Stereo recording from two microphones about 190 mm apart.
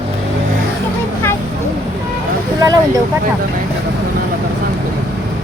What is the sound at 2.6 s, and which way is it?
Speech, 20° right (ahead or behind).